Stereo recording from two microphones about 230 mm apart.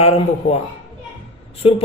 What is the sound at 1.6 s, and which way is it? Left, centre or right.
Speech, left.